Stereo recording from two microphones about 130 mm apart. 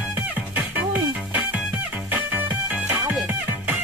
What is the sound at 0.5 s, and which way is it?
Music, 10° right (ahead or behind).